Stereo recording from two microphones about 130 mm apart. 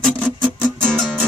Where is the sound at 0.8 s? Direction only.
5° left (ahead or behind).